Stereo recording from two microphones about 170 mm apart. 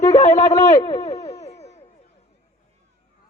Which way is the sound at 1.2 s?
40° left (ahead or behind).